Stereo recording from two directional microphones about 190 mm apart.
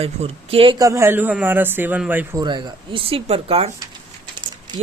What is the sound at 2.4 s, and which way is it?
Speech, 25° right (ahead or behind).